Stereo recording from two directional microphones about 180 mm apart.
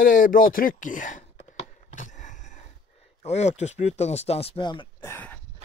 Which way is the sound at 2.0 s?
45° left (ahead or behind).